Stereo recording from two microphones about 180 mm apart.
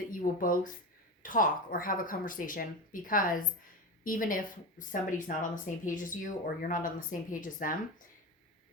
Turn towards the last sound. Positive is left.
turn(degrees=50)  # may be behind; listen again after turning